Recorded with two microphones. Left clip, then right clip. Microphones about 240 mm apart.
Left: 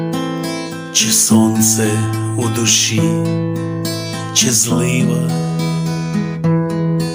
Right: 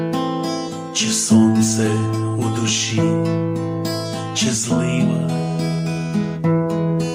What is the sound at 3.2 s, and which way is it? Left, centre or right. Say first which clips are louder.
Music: left 1 dB; left.